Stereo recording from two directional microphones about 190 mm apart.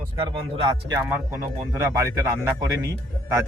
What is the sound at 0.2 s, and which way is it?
Speech, 25° right (ahead or behind).